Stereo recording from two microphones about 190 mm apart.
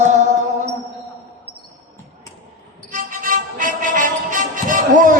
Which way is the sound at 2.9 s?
45° right (ahead or behind).